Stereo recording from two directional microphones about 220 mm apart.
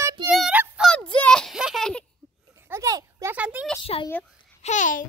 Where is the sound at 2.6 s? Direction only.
15° right (ahead or behind).